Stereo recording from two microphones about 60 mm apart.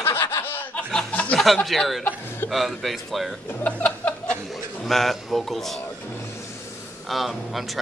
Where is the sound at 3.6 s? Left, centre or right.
Left.